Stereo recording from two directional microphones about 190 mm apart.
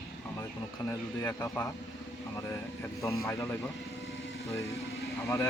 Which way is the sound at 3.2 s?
15° left (ahead or behind).